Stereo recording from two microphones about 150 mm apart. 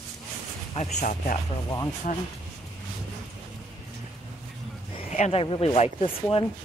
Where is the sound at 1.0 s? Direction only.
60° left (ahead or behind).